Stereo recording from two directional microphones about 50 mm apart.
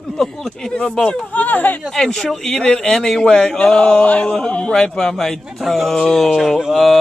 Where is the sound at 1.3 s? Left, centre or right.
Left.